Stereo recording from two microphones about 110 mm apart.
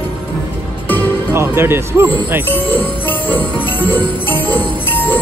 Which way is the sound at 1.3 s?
20° right (ahead or behind).